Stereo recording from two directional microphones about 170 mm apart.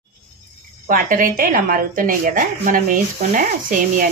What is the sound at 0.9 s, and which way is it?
A woman's voice, 55° right (ahead or behind).